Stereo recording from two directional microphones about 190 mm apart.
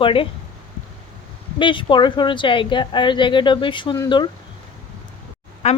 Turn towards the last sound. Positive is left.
turn(degrees=35)  # may be behind; listen again after turning